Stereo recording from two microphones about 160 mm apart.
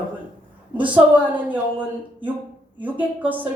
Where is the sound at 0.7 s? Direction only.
10° right (ahead or behind).